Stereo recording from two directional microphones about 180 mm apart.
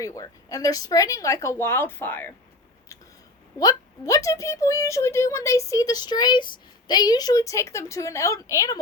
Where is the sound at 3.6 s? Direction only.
20° left (ahead or behind).